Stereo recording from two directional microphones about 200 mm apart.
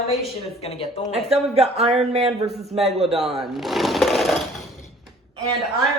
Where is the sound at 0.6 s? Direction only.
30° left (ahead or behind).